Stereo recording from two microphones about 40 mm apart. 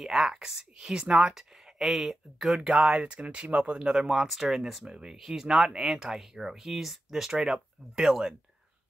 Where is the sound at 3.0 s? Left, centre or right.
Right.